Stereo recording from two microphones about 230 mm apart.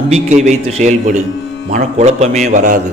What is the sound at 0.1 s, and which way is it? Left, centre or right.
A man's voice, right.